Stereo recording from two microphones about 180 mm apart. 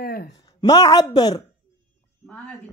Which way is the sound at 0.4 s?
20° left (ahead or behind).